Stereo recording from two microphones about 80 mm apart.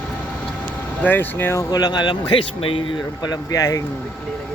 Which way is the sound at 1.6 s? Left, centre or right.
Left.